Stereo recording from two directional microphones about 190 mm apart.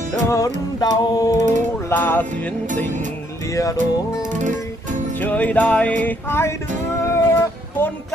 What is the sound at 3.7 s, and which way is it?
Music, 40° right (ahead or behind).